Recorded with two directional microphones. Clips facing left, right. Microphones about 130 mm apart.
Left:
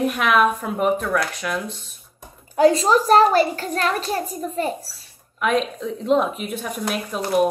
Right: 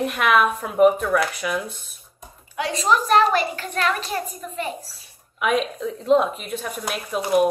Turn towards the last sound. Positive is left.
turn(degrees=-5)  # may be behind; listen again after turning